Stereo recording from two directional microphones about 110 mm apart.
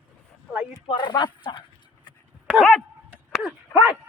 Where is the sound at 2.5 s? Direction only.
10° left (ahead or behind).